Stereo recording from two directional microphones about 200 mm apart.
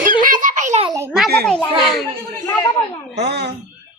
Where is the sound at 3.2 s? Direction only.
55° right (ahead or behind).